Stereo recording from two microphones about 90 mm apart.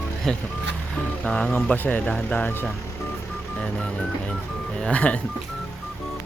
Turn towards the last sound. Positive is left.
turn(degrees=15)  # may be behind; listen again after turning